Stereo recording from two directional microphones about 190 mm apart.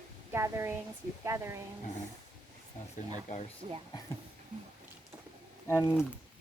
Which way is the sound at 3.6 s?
35° right (ahead or behind).